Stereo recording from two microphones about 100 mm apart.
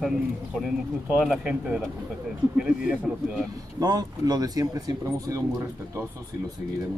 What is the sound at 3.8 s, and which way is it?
Speech, 40° right (ahead or behind).